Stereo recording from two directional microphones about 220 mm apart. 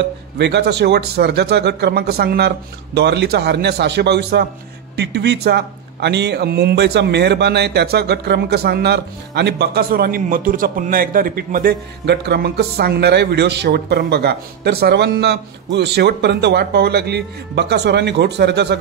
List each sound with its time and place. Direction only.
0.4 s a man's voice: 50° right (ahead or behind)